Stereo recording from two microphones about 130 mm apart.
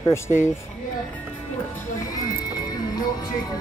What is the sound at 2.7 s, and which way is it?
Music, 30° left (ahead or behind).